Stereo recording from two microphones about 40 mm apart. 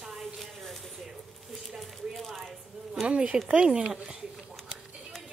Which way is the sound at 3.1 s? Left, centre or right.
Right.